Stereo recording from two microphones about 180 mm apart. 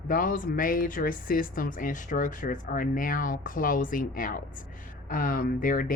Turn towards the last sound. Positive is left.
turn(degrees=50)  # may be behind; listen again after turning